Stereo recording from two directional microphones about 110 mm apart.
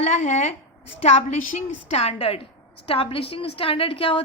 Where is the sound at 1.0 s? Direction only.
80° left.